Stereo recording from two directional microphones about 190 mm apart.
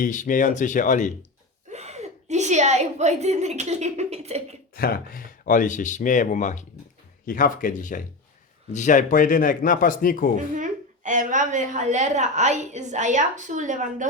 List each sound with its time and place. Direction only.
0.0 s speech: 40° left (ahead or behind)
1.7 s a woman's voice: 35° right (ahead or behind)
4.7 s speech: 50° left (ahead or behind)
10.5 s a woman's voice: 40° right (ahead or behind)